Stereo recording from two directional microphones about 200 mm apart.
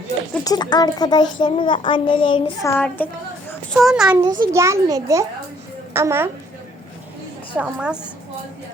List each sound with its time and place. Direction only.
0.4 s a child's voice: 20° left (ahead or behind); by 4.2 s 5° right (ahead or behind)
4.4 s a child's voice: 15° right (ahead or behind)
7.5 s a woman's voice: 5° right (ahead or behind)